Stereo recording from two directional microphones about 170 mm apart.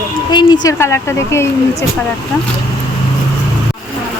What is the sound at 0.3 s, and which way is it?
Speech, 25° left (ahead or behind).